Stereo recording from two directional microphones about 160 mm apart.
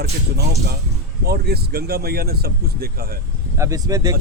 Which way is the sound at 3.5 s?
20° right (ahead or behind).